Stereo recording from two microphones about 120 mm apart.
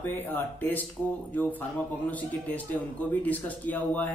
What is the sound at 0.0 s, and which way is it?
Speech, 15° left (ahead or behind).